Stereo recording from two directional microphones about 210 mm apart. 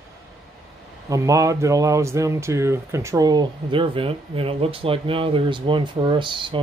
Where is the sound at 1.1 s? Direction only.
15° right (ahead or behind).